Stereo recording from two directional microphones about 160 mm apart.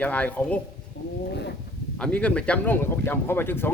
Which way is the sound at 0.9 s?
90° left.